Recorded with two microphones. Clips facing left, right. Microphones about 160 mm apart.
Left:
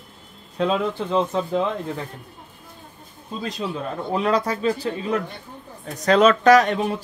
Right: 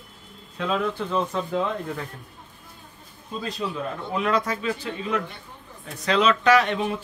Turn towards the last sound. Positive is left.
turn(degrees=40)  # may be behind; listen again after turning